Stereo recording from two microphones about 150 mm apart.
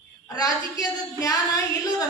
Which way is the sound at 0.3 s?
25° left (ahead or behind).